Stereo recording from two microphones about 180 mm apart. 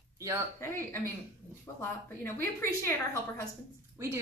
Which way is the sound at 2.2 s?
15° left (ahead or behind).